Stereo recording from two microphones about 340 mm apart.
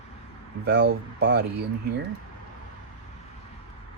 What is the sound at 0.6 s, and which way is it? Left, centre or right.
Speech, right.